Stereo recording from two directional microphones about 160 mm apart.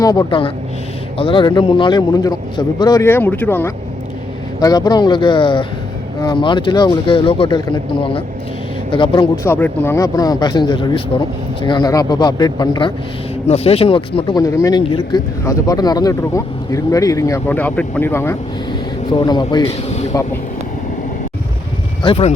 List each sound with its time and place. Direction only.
0.0 s speech: 25° left (ahead or behind)
4.6 s speech: 25° left (ahead or behind)
9.4 s speech: 10° left (ahead or behind)
13.5 s speech: 40° left (ahead or behind); by 18.3 s 15° left (ahead or behind)
19.1 s speech: 25° left (ahead or behind)
22.0 s speech: 35° left (ahead or behind)